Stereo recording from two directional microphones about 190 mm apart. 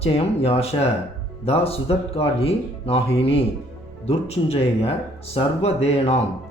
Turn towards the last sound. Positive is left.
turn(degrees=35)  # may be behind; listen again after turning